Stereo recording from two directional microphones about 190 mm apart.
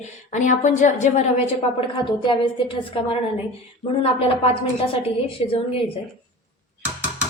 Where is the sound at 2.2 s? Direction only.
25° left (ahead or behind).